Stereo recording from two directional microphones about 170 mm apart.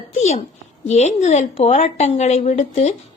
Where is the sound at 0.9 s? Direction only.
40° left (ahead or behind).